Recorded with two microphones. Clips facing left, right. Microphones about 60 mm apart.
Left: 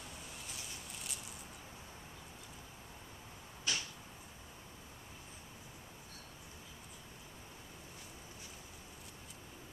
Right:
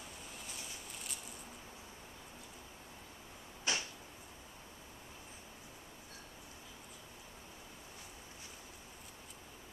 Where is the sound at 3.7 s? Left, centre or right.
Right.